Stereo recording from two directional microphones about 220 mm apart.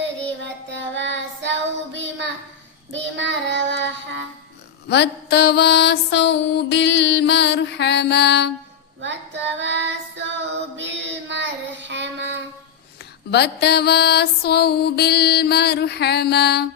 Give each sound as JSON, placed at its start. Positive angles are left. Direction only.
{"t": 0.0, "sound": "child singing", "side_deg": -55}
{"t": 4.9, "sound": "music", "side_deg": 50}
{"t": 9.0, "sound": "child singing", "side_deg": -55}
{"t": 13.3, "sound": "music", "side_deg": 50}